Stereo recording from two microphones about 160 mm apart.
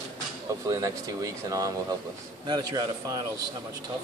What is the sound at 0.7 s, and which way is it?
Speech, 20° right (ahead or behind).